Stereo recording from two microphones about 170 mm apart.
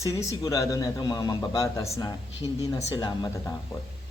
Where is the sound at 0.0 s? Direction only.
20° left (ahead or behind).